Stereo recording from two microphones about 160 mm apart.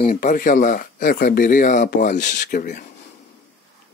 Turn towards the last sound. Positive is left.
turn(degrees=50)  # may be behind; listen again after turning